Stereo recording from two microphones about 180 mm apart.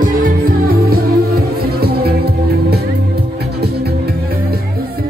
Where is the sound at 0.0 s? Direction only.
50° right (ahead or behind).